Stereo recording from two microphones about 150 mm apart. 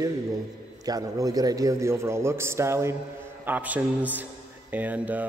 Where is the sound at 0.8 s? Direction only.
25° right (ahead or behind).